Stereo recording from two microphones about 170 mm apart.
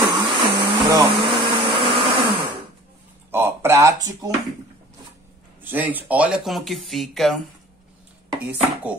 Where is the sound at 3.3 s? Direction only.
15° right (ahead or behind).